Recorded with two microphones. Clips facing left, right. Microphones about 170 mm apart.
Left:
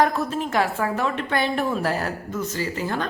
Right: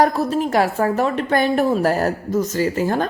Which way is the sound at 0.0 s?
40° right (ahead or behind).